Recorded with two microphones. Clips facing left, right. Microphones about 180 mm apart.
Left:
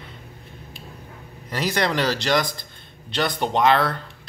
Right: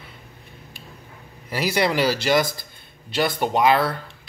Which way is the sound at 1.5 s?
5° right (ahead or behind).